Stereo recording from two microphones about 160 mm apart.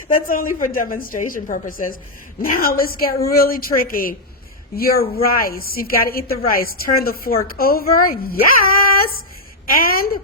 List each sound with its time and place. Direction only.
0.3 s a woman's voice: 60° left (ahead or behind)